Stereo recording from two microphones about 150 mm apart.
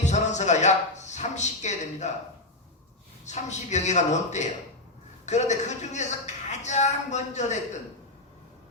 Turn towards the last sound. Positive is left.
turn(degrees=50)  # may be behind; listen again after turning